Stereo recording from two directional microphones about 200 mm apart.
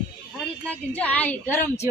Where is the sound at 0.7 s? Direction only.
5° left (ahead or behind).